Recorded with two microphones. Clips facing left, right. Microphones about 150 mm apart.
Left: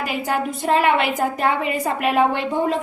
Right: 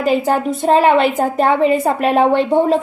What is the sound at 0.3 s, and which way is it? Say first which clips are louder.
A woman's voice: right 6 dB; 30° right (ahead or behind).